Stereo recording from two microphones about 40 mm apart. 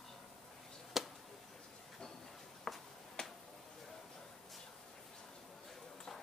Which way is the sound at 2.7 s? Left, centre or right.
Centre.